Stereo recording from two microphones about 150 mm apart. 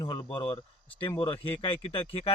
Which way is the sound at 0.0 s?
30° left (ahead or behind).